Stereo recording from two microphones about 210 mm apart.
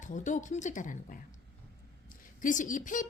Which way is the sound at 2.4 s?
40° left (ahead or behind).